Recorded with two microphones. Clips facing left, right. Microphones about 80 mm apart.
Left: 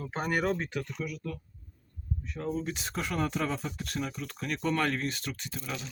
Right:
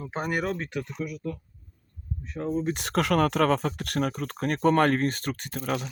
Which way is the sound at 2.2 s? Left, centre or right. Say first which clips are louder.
Right 6 dB; right.